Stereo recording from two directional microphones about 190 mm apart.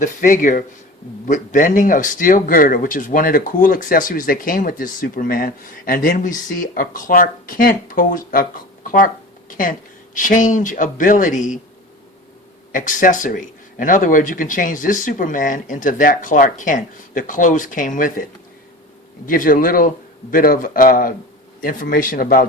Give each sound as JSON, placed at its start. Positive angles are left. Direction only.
{"t": 0.0, "sound": "speech", "side_deg": 45}
{"t": 12.7, "sound": "speech", "side_deg": 45}